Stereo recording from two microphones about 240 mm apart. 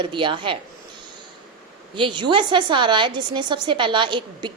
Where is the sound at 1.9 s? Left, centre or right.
Centre.